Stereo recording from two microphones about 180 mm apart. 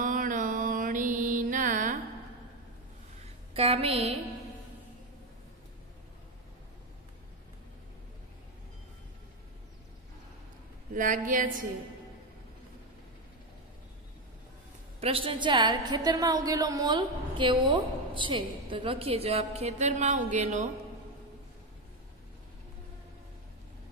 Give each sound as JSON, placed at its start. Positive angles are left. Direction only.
{"t": 0.0, "sound": "mantra", "side_deg": -50}
{"t": 3.5, "sound": "a woman's voice", "side_deg": -30}
{"t": 11.0, "sound": "a sound", "side_deg": -45}
{"t": 15.0, "sound": "a woman's voice", "side_deg": -30}